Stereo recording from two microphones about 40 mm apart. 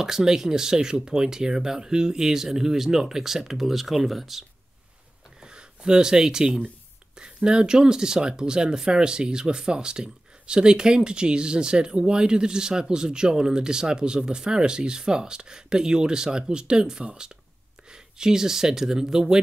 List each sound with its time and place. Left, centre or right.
0.0 s speech: centre
5.4 s speech: right